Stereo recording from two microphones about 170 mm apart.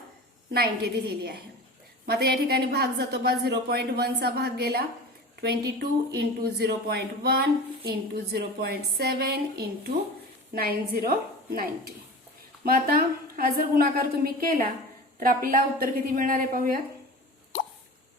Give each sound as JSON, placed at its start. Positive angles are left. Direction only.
{"t": 0.5, "sound": "a woman's voice", "side_deg": -70}
{"t": 15.2, "sound": "a woman's voice", "side_deg": -55}